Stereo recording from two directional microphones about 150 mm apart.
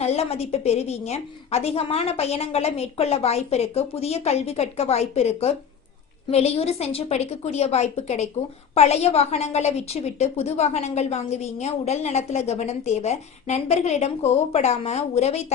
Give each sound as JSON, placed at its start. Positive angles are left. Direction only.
{"t": 0.0, "sound": "a woman's voice", "side_deg": 45}